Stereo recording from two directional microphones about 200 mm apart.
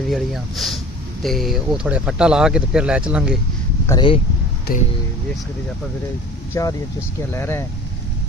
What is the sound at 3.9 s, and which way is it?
Speech, 25° left (ahead or behind).